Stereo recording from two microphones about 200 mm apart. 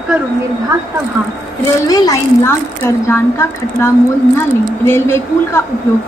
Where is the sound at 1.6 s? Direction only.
20° left (ahead or behind).